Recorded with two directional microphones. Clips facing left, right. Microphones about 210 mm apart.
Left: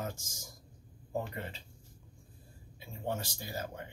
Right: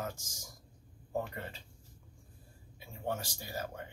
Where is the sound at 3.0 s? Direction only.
25° left (ahead or behind).